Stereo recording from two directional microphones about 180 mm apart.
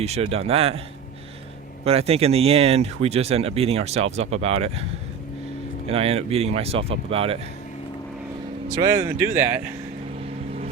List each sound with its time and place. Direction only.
0.0 s speech: 35° right (ahead or behind)
1.8 s speech: 35° right (ahead or behind)
8.7 s speech: 20° right (ahead or behind)